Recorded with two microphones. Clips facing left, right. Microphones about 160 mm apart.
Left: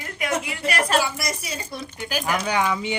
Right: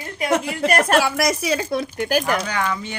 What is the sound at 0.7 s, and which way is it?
Speech, 50° right (ahead or behind).